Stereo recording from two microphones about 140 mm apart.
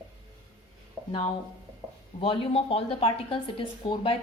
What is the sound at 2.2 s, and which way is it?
A woman's voice, 40° left (ahead or behind).